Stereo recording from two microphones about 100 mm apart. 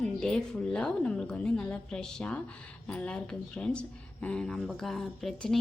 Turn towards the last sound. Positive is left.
turn(degrees=5)  # may be behind; listen again after turning